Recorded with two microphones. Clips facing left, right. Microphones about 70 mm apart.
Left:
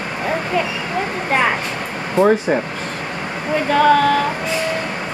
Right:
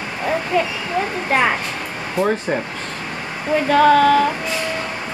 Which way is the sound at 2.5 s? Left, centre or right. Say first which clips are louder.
Left 4 dB; centre.